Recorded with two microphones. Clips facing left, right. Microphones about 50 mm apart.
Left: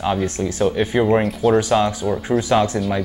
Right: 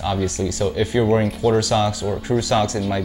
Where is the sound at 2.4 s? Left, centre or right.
Left.